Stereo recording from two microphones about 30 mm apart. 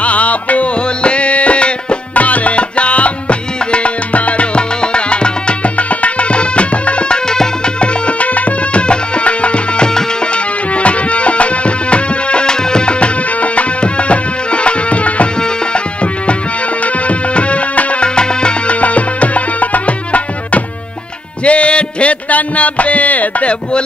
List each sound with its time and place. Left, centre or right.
0.0 s music: left
1.0 s music: left
2.1 s music: left
4.6 s music: left
7.2 s music: left
7.8 s music: left
8.8 s music: left
12.4 s music: left
13.0 s music: left